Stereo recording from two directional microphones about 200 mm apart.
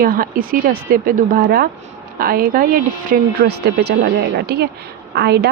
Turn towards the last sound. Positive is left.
turn(degrees=-55)  # may be behind; listen again after turning